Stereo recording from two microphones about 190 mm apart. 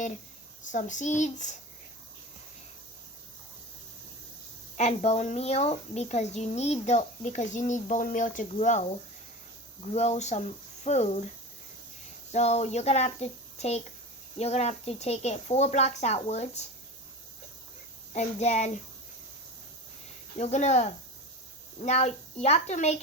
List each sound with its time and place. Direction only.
0.7 s speech: 40° left (ahead or behind)
4.8 s speech: 35° left (ahead or behind)
12.3 s speech: 35° left (ahead or behind)
18.1 s speech: 35° left (ahead or behind)
20.4 s speech: 40° left (ahead or behind)